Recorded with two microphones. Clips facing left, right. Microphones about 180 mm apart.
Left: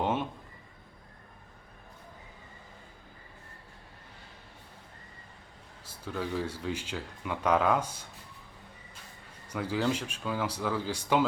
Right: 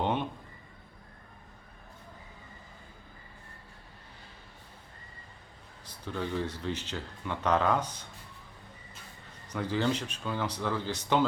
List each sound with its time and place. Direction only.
0.0 s a sound: 5° left (ahead or behind)
5.8 s speech: 5° left (ahead or behind)
9.5 s speech: 10° left (ahead or behind)